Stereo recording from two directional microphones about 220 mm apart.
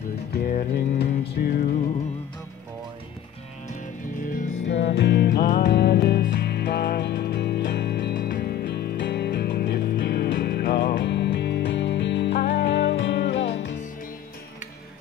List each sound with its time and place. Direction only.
0.3 s music: 45° left (ahead or behind)
4.6 s music: 55° left (ahead or behind)